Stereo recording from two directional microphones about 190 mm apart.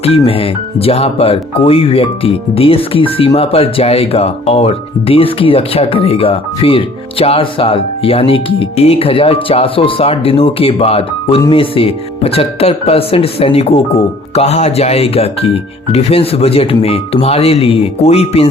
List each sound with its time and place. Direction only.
0.0 s speech: 30° left (ahead or behind)